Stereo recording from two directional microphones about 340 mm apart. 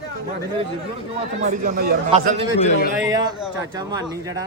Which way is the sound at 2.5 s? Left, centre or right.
Left.